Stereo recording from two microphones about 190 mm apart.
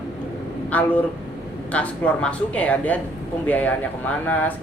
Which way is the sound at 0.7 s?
10° left (ahead or behind).